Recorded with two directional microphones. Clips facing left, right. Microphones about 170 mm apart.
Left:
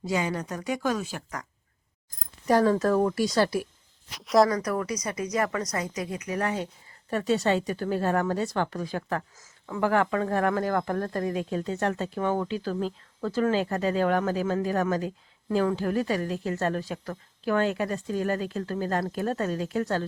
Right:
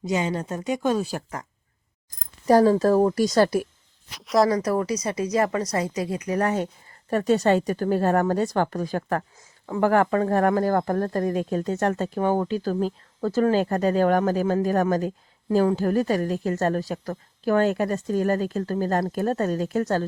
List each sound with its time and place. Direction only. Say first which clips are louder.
0.0 s speech: right 3 dB; 20° right (ahead or behind)
2.5 s speech: right 5 dB; 35° right (ahead or behind)
4.1 s speech: even; centre (ahead or behind)
4.4 s speech: right 5 dB; 30° right (ahead or behind)